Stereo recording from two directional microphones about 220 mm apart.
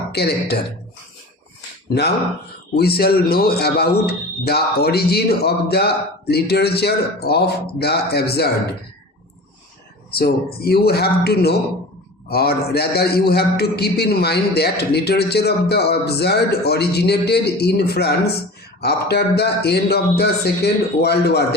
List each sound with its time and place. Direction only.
0.1 s a man's voice: 45° left (ahead or behind)
2.7 s a man's voice: 45° left (ahead or behind)
10.1 s a man's voice: 45° left (ahead or behind)